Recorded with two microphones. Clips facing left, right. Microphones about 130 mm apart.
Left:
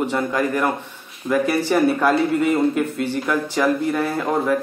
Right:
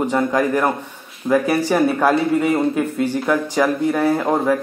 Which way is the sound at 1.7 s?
15° right (ahead or behind).